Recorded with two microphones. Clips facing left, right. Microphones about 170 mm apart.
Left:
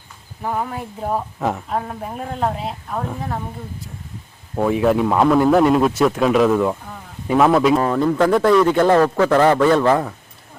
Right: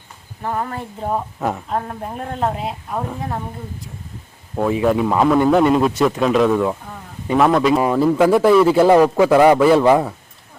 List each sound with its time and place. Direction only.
0.4 s a man's voice: 5° left (ahead or behind)
4.5 s a man's voice: centre (ahead or behind)